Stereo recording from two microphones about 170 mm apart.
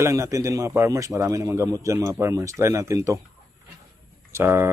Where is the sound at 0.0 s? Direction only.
20° right (ahead or behind).